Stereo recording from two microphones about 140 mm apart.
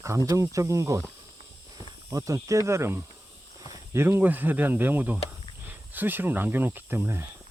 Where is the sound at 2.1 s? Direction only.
25° right (ahead or behind).